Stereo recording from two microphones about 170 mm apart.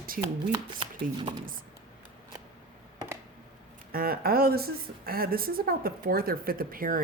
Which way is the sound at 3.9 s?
60° right (ahead or behind).